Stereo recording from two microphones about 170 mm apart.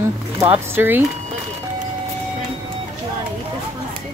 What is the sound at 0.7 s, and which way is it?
Speech, 15° right (ahead or behind).